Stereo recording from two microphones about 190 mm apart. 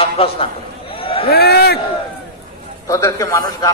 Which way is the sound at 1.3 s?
55° left (ahead or behind).